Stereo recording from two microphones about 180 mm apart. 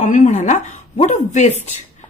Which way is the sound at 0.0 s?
40° left (ahead or behind).